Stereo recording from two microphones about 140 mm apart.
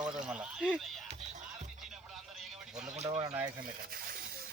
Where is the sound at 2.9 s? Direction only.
50° right (ahead or behind).